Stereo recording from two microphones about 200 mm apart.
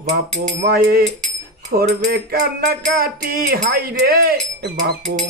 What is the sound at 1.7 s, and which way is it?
Cutlery, 35° right (ahead or behind).